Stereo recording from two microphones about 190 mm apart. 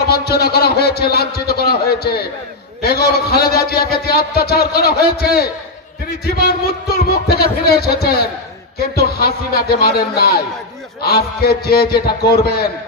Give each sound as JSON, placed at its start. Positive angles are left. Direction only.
{"t": 0.0, "sound": "a man's voice", "side_deg": 55}